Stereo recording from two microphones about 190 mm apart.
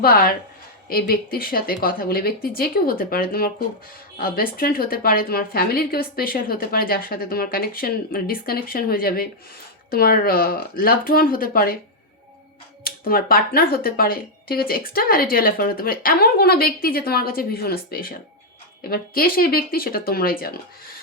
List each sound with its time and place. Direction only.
0.0 s speech: 50° left (ahead or behind)
12.8 s speech: 50° left (ahead or behind)